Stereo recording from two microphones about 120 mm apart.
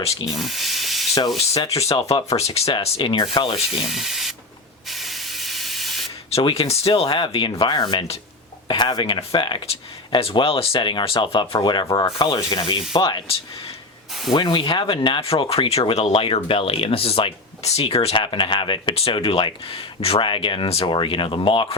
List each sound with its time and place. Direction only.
0.0 s speech: 55° left (ahead or behind)
0.3 s speech: centre (ahead or behind)
1.7 s speech: 60° left (ahead or behind)
3.1 s speech: 45° left (ahead or behind)
3.8 s speech: centre (ahead or behind)
4.9 s spray: centre (ahead or behind)
6.3 s speech: 55° left (ahead or behind)
14.3 s speech: 40° left (ahead or behind)